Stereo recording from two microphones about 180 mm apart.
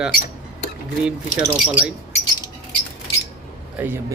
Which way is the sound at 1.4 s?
10° right (ahead or behind).